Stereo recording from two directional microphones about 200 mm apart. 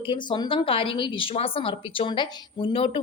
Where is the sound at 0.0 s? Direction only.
25° left (ahead or behind).